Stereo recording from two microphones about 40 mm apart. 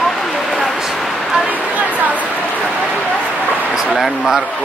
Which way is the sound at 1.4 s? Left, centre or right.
Right.